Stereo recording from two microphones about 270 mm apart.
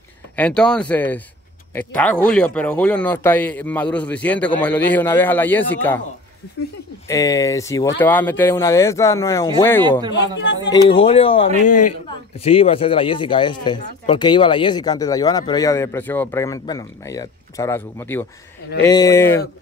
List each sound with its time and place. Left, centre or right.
0.4 s a man's voice: centre
7.1 s speech: centre
10.2 s speech: left
10.7 s speech: centre